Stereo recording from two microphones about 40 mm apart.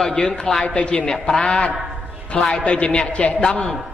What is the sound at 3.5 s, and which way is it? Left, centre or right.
Mantra, centre.